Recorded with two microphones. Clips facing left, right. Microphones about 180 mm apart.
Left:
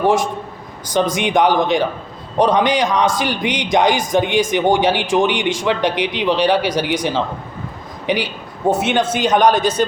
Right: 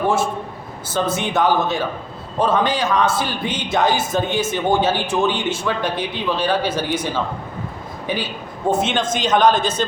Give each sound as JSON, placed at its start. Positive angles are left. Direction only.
{"t": 0.9, "sound": "a man's voice", "side_deg": 15}
{"t": 8.7, "sound": "a man's voice", "side_deg": 10}